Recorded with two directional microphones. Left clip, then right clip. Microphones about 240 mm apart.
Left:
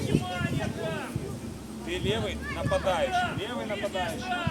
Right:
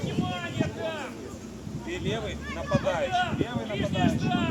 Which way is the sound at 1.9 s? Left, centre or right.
Left.